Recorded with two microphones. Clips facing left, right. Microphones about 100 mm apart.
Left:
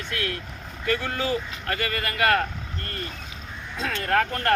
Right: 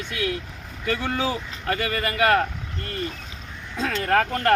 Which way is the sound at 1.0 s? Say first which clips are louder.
Right 1 dB; 20° right (ahead or behind).